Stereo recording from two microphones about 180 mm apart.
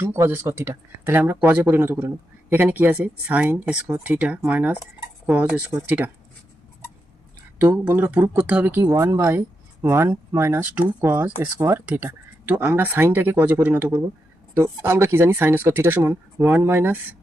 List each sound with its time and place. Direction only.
0.0 s speech: 15° right (ahead or behind)
7.9 s speech: 10° right (ahead or behind)